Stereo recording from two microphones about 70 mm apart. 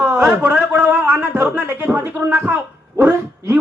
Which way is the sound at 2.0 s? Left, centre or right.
Right.